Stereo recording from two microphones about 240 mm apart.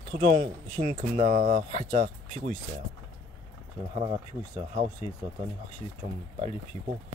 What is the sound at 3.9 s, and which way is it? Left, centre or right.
Speech, centre.